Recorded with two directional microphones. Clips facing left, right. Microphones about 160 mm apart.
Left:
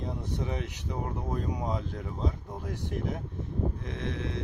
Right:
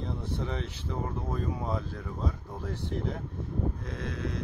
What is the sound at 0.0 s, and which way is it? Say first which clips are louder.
Speech: even; 15° left (ahead or behind).